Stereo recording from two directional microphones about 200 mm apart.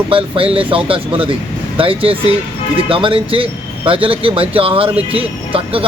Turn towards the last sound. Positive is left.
turn(degrees=-25)  # may be behind; listen again after turning